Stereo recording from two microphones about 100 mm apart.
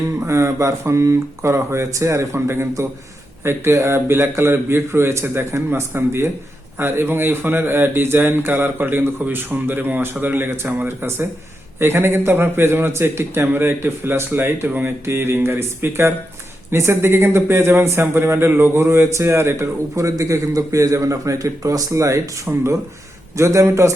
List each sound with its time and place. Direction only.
0.2 s speech: 30° right (ahead or behind)